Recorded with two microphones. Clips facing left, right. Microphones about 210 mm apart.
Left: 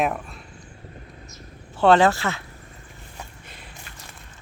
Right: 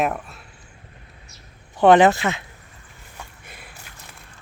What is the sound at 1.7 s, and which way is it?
Speech, 15° right (ahead or behind).